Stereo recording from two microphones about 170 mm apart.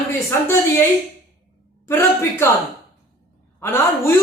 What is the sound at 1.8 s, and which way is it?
Speech, 15° left (ahead or behind).